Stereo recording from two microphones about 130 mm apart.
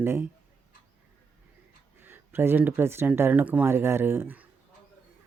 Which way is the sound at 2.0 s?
15° right (ahead or behind).